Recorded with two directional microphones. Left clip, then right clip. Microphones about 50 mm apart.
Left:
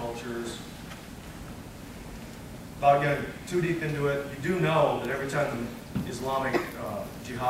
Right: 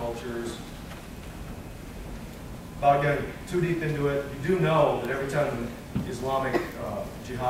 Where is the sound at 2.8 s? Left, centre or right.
Centre.